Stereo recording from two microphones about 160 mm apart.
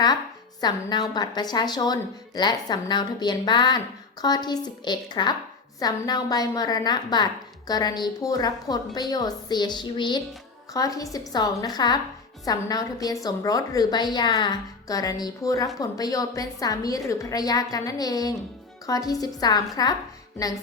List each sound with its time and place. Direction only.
0.6 s a woman's voice: 25° left (ahead or behind)